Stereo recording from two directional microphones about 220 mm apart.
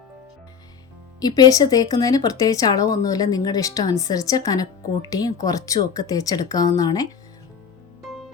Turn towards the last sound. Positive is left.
turn(degrees=15)  # may be behind; listen again after turning